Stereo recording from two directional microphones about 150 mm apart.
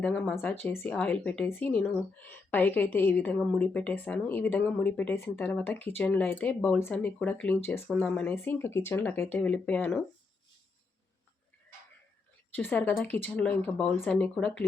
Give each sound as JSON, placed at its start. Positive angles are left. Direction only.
{"t": 0.0, "sound": "speech", "side_deg": 10}
{"t": 12.5, "sound": "speech", "side_deg": 10}